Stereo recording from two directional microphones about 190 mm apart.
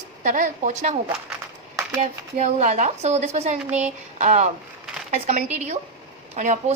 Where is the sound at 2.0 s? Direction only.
35° right (ahead or behind).